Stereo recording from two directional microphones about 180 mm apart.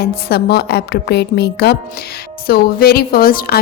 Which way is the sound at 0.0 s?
65° left (ahead or behind).